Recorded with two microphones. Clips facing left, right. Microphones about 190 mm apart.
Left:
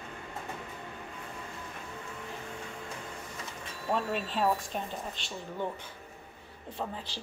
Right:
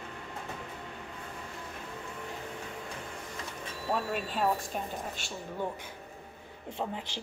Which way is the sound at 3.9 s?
10° right (ahead or behind).